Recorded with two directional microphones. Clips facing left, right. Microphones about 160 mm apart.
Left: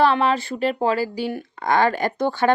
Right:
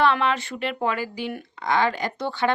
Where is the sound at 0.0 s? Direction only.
35° left (ahead or behind).